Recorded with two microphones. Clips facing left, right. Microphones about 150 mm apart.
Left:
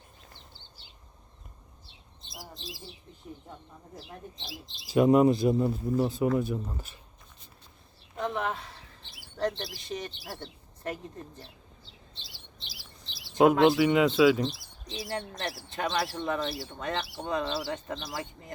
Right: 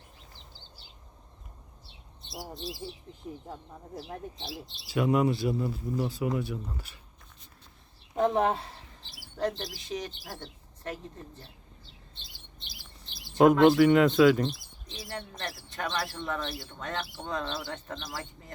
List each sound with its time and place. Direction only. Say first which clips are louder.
4.9 s speech: left 5 dB; 25° left (ahead or behind)
5.7 s speech: left 4 dB; 45° left (ahead or behind)
6.5 s speech: left 3 dB; 20° left (ahead or behind)
8.1 s bird: right 6 dB; 40° right (ahead or behind)
9.4 s speech: even; 10° right (ahead or behind)
10.2 s speech: left 1 dB; 10° left (ahead or behind)
12.1 s chirp: left 2 dB; 50° right (ahead or behind)
13.4 s speech: right 2 dB; 5° left (ahead or behind)